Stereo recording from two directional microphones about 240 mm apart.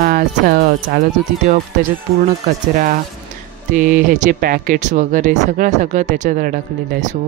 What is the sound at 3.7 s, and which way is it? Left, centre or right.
Speech, right.